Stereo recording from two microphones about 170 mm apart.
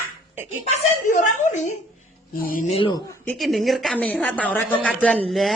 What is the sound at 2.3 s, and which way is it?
Speech, 55° left (ahead or behind).